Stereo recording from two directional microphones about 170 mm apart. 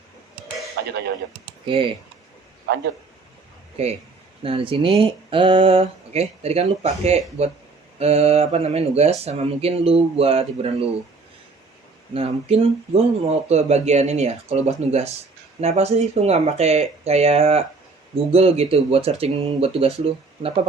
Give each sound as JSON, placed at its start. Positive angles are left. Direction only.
{"t": 1.6, "sound": "speech", "side_deg": -30}
{"t": 3.8, "sound": "speech", "side_deg": -35}
{"t": 12.1, "sound": "speech", "side_deg": -35}